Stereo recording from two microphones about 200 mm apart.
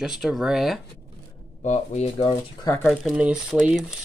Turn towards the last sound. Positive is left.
turn(degrees=-5)  # may be behind; listen again after turning